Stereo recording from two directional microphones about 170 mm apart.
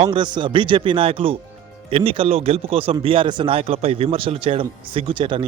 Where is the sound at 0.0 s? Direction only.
30° right (ahead or behind).